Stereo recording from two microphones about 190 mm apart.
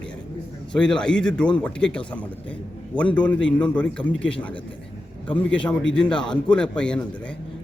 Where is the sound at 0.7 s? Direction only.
5° left (ahead or behind).